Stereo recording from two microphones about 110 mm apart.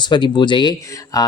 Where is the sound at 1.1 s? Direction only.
35° left (ahead or behind).